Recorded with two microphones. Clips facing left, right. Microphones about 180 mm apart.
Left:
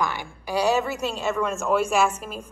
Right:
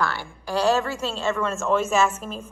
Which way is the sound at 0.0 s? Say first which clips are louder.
Even; 15° left (ahead or behind).